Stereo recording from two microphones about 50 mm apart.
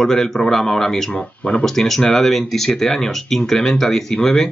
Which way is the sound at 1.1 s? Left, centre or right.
Centre.